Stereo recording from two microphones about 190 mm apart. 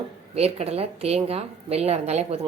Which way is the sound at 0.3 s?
35° right (ahead or behind).